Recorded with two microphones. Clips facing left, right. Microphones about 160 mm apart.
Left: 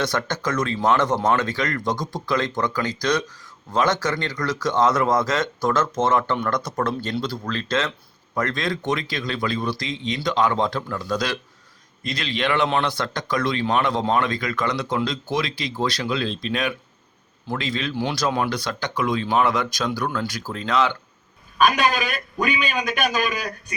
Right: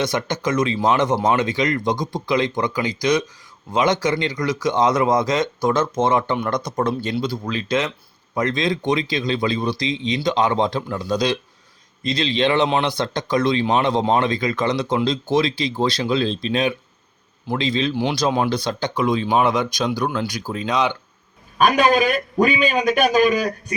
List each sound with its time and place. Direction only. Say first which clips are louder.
0.0 s speech: right 2 dB; 15° right (ahead or behind)
21.7 s a man's voice: right 6 dB; 35° right (ahead or behind)